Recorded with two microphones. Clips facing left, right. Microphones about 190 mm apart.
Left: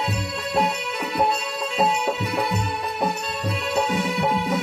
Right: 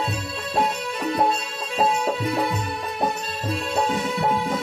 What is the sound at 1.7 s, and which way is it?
Music, 70° left (ahead or behind).